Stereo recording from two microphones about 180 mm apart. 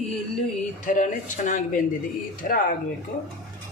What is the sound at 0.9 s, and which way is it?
Speech, 50° left (ahead or behind).